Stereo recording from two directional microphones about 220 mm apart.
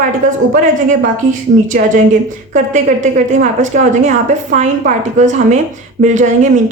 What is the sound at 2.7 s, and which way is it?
A woman's voice, 35° right (ahead or behind).